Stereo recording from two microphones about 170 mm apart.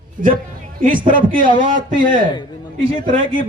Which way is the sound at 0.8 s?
50° right (ahead or behind).